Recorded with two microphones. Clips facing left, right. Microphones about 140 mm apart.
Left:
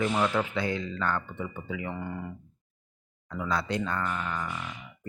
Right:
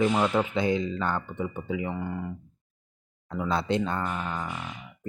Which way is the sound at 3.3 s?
25° right (ahead or behind).